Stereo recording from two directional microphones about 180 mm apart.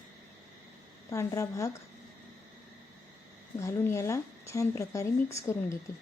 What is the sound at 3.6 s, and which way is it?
Speech, 15° left (ahead or behind).